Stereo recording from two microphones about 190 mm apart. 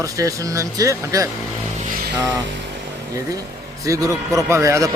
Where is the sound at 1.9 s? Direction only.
50° right (ahead or behind).